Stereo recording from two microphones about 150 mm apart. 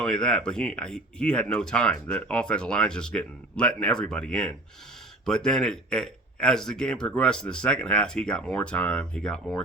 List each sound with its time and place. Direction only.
0.0 s a man's voice: 5° left (ahead or behind)